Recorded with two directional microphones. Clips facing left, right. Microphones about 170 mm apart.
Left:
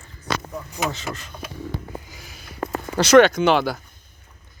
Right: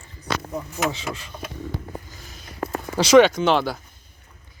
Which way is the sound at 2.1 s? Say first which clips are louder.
Even; 10° left (ahead or behind).